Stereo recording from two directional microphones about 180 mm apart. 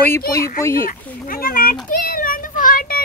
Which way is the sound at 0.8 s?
50° left (ahead or behind).